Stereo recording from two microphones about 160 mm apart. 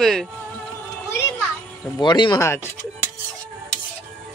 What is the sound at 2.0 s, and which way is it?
Speech, 30° left (ahead or behind).